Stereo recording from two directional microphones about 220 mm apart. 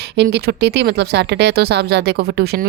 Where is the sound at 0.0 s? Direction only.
50° right (ahead or behind).